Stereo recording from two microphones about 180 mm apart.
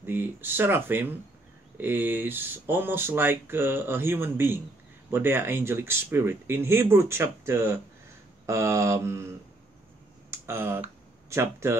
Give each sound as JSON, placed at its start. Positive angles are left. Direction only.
{"t": 0.0, "sound": "speech", "side_deg": -10}
{"t": 10.3, "sound": "a sound", "side_deg": -15}
{"t": 11.2, "sound": "speech", "side_deg": -15}